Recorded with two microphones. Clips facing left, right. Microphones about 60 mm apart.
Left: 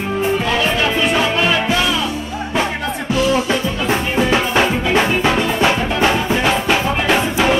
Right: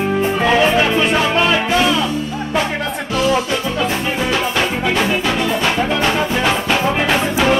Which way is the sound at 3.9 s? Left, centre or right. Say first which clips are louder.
Left 2 dB; centre.